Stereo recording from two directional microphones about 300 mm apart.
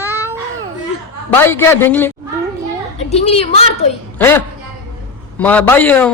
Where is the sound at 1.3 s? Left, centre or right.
Centre.